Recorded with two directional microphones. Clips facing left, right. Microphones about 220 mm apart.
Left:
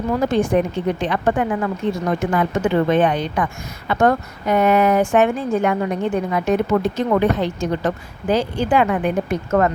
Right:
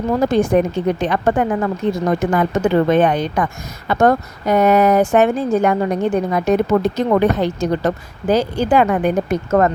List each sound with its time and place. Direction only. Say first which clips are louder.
0.3 s speech: right 3 dB; 40° right (ahead or behind)